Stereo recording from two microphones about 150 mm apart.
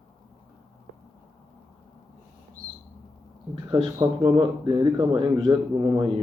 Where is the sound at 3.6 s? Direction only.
30° right (ahead or behind).